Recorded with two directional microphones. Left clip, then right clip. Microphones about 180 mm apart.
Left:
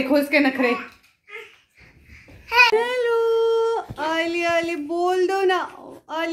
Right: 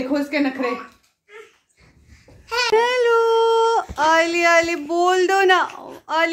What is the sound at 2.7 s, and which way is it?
Dog, 5° right (ahead or behind).